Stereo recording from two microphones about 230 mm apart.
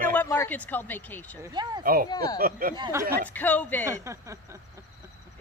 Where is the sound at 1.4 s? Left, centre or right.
Centre.